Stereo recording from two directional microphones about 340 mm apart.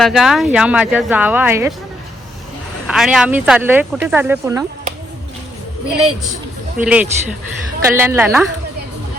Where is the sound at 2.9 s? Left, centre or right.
Centre.